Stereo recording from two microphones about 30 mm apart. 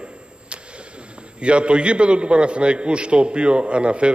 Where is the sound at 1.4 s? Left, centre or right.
Right.